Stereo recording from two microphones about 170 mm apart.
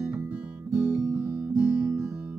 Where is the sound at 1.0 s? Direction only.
20° right (ahead or behind).